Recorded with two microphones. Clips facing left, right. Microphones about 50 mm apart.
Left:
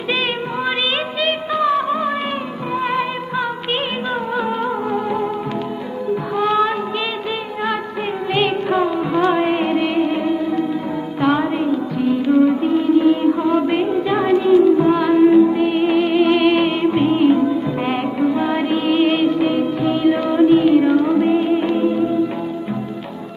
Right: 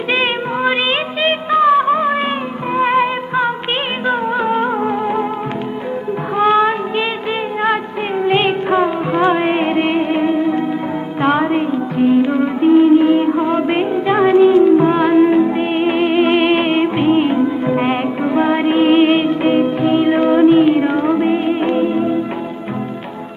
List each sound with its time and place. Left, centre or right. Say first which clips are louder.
0.1 s music: right 3 dB; right
6.3 s music: right 5 dB; right